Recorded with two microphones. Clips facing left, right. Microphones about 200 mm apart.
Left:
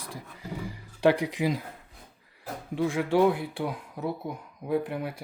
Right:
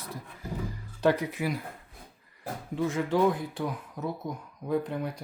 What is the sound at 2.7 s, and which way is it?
Speech, 10° left (ahead or behind).